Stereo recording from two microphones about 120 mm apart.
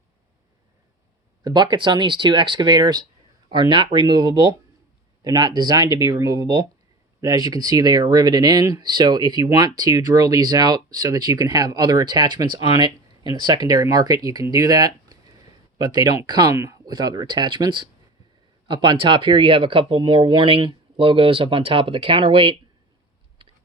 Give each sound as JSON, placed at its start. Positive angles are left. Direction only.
{"t": 1.5, "sound": "speech", "side_deg": -40}